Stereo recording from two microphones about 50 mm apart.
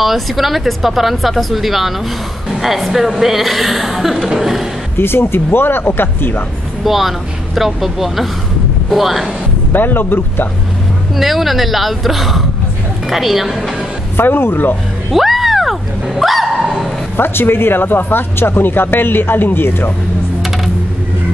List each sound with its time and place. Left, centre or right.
0.0 s a woman's voice: centre
4.9 s speech: left
6.8 s a woman's voice: centre
9.7 s speech: left
11.1 s a woman's voice: centre
14.1 s speech: left
15.1 s a sound: centre
17.2 s speech: left